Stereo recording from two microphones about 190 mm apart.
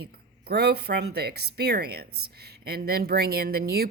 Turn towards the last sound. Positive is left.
turn(degrees=-55)  # may be behind; listen again after turning